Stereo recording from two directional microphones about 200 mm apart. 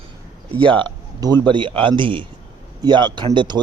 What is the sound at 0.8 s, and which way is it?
A man's voice, 20° right (ahead or behind).